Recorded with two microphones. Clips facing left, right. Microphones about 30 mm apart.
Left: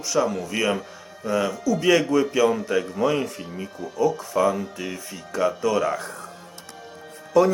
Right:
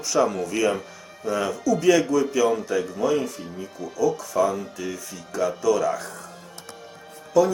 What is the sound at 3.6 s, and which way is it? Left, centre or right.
Speech, left.